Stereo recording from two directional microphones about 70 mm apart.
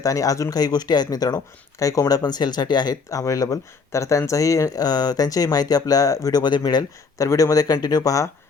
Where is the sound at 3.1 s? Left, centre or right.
Left.